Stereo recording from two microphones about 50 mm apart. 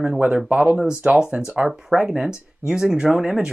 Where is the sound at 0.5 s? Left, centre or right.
Right.